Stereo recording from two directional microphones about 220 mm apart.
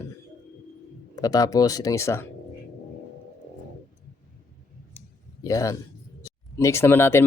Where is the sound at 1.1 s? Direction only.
15° left (ahead or behind).